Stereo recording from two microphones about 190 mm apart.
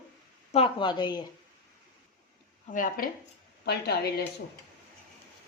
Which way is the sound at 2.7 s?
50° left (ahead or behind).